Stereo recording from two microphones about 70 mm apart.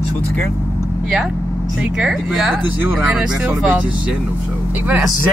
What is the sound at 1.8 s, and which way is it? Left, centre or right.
Speech, centre.